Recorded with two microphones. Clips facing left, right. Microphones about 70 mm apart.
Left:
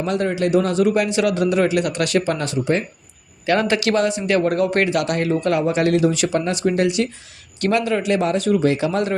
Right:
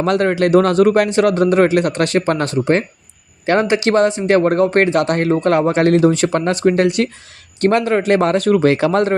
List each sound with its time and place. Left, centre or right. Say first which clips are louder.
0.0 s a man's voice: right 5 dB; right
3.4 s a man's voice: right 3 dB; right